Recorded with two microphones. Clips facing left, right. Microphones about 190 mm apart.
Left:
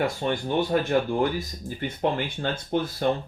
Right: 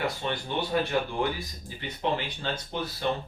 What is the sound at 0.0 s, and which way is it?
Speech, 45° left (ahead or behind).